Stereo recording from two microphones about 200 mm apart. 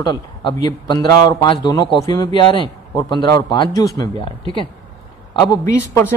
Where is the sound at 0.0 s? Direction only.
20° left (ahead or behind).